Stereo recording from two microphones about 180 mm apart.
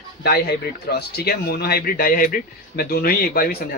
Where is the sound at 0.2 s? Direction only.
65° left (ahead or behind).